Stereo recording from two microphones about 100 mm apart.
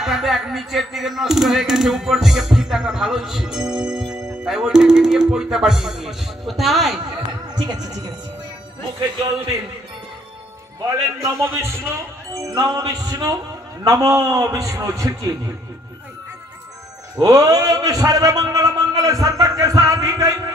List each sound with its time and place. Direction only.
0.0 s speech: centre (ahead or behind)
7.2 s music: 45° right (ahead or behind)
10.8 s a man's voice: 35° right (ahead or behind)
12.3 s a man's voice: 35° right (ahead or behind)
17.2 s a man's voice: 35° right (ahead or behind)